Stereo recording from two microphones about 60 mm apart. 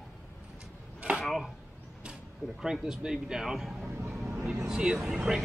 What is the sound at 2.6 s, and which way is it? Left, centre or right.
Speech, centre.